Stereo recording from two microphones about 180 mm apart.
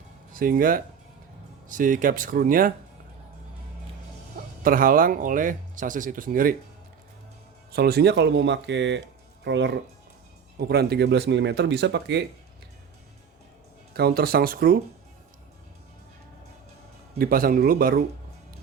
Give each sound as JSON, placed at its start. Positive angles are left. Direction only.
{"t": 0.3, "sound": "speech", "side_deg": -50}
{"t": 4.6, "sound": "speech", "side_deg": -50}
{"t": 7.7, "sound": "speech", "side_deg": -60}
{"t": 10.6, "sound": "speech", "side_deg": -60}
{"t": 13.9, "sound": "speech", "side_deg": -60}
{"t": 17.2, "sound": "speech", "side_deg": -50}